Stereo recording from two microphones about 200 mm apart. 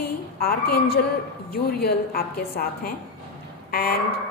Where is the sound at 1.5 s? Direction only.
50° left (ahead or behind).